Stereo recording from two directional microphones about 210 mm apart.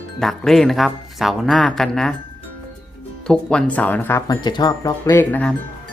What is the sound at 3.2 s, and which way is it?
Speech, 5° left (ahead or behind).